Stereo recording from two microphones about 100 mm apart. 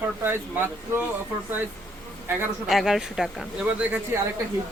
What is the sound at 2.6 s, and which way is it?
Speech, 5° right (ahead or behind).